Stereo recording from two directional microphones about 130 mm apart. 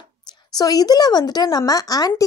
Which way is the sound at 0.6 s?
30° left (ahead or behind).